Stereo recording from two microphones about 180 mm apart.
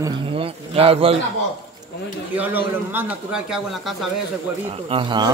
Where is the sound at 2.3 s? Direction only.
10° right (ahead or behind).